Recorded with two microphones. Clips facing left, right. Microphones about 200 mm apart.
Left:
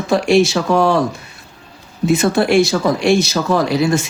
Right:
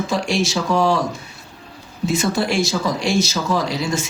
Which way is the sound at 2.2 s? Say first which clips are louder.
Left 7 dB; 60° left (ahead or behind).